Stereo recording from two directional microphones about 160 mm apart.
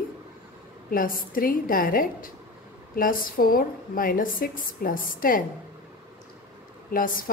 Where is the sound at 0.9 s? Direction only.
60° left (ahead or behind).